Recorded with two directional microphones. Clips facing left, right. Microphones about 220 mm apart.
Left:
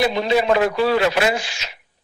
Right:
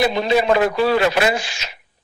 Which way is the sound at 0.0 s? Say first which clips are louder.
Right 1 dB; 50° right (ahead or behind).